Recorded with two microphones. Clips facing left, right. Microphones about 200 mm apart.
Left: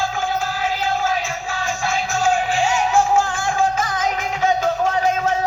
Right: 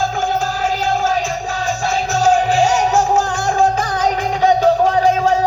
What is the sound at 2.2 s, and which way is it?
Music, 40° right (ahead or behind).